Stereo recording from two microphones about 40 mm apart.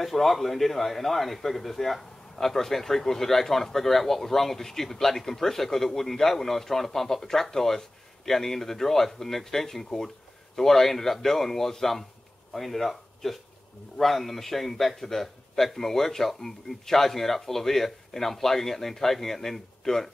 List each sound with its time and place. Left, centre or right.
0.0 s a man's voice: centre